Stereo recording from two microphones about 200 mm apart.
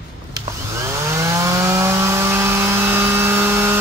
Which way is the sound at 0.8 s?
15° right (ahead or behind).